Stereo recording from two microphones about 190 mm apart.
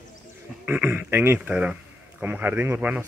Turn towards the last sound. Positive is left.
turn(degrees=-10)  # may be behind; listen again after turning